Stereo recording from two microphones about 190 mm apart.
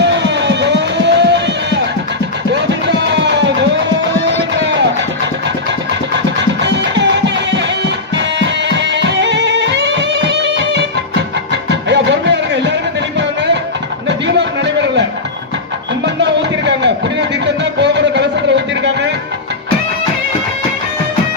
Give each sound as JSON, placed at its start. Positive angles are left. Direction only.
{"t": 0.0, "sound": "music", "side_deg": -65}
{"t": 2.5, "sound": "music", "side_deg": -65}
{"t": 6.6, "sound": "music", "side_deg": -70}
{"t": 14.1, "sound": "a sound", "side_deg": -70}
{"t": 16.2, "sound": "music", "side_deg": -65}